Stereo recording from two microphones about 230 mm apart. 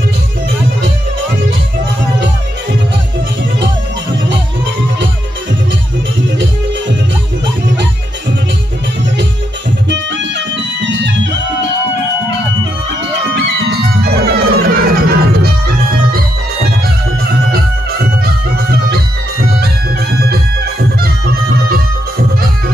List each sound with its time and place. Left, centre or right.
9.8 s music: right
13.7 s music: right
18.2 s music: right